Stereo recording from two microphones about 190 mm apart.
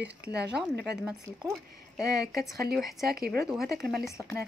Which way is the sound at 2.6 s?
55° right (ahead or behind).